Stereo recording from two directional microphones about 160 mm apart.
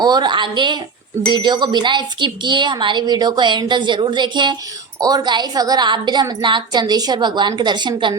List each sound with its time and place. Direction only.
0.0 s speech: 25° right (ahead or behind)